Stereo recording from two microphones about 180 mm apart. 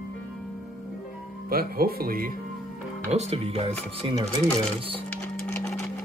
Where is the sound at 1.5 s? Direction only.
55° right (ahead or behind).